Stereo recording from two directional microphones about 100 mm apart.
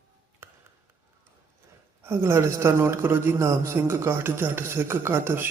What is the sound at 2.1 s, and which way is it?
A man's voice, 25° right (ahead or behind).